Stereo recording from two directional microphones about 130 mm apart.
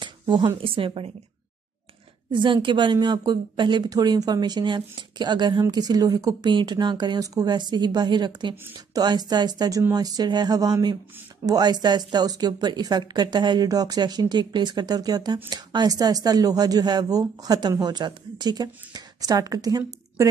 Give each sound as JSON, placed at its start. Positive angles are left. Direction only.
{"t": 0.0, "sound": "a sound", "side_deg": -40}
{"t": 0.6, "sound": "a woman's voice", "side_deg": -45}
{"t": 2.3, "sound": "a woman's voice", "side_deg": -40}